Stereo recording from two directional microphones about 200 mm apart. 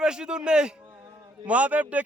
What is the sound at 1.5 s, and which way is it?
Speech, 5° right (ahead or behind).